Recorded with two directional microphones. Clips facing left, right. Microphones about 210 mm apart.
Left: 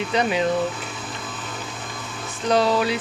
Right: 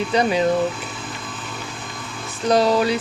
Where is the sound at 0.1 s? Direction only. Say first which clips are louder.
Right 3 dB; 35° right (ahead or behind).